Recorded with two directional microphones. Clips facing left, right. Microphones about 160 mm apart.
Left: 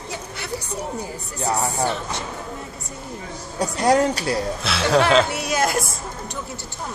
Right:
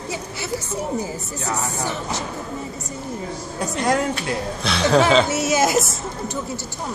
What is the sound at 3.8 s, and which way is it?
Speech, 35° left (ahead or behind).